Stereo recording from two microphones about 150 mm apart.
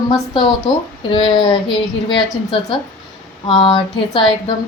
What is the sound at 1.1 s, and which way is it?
Speech, 30° left (ahead or behind).